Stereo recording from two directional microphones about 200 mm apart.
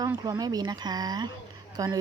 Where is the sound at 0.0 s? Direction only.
20° right (ahead or behind).